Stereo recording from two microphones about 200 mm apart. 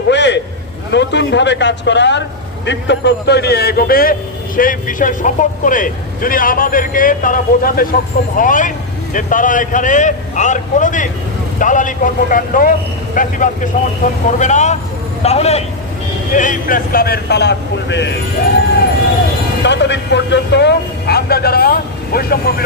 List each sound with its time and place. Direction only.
0.1 s a sound: 60° left (ahead or behind)
0.9 s a man's voice: 60° left (ahead or behind)
19.6 s speech: 60° left (ahead or behind)